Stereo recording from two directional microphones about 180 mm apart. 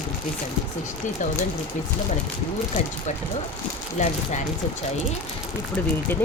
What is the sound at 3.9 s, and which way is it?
Speech, 40° left (ahead or behind).